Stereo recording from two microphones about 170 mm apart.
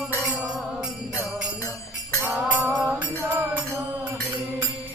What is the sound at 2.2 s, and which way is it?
Music, 10° right (ahead or behind).